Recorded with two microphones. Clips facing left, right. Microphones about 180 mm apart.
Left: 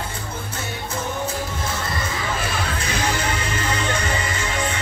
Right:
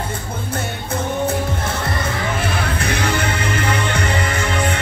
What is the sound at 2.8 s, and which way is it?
Music, 60° right (ahead or behind).